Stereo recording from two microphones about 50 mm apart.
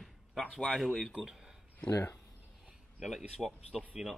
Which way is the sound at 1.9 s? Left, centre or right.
Left.